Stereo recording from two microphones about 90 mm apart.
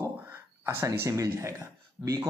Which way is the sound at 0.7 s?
30° right (ahead or behind).